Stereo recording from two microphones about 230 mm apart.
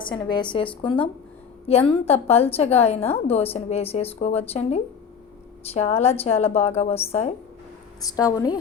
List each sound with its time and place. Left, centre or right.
0.0 s a woman's voice: left
8.1 s speech: centre